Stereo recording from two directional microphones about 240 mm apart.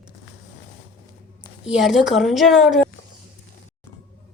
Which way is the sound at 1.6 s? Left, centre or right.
Centre.